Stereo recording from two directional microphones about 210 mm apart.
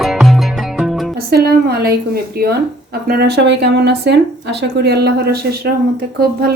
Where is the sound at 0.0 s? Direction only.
Centre (ahead or behind).